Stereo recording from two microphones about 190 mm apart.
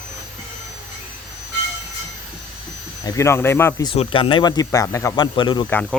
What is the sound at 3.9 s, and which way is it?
Speech, 30° left (ahead or behind).